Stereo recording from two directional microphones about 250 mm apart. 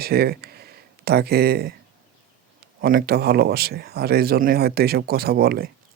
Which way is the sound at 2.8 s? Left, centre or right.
Right.